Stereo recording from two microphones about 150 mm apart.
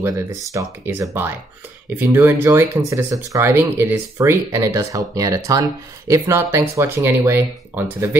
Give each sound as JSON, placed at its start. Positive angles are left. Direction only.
{"t": 0.0, "sound": "speech", "side_deg": -20}